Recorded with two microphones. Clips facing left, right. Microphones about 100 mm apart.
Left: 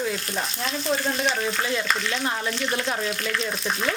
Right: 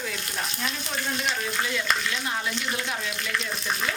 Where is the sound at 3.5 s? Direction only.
Centre (ahead or behind).